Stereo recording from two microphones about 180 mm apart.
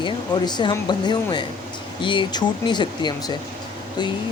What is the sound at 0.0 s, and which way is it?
Speech, 25° left (ahead or behind).